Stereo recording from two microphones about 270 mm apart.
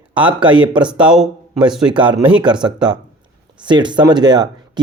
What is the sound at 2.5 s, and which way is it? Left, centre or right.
Speech, centre.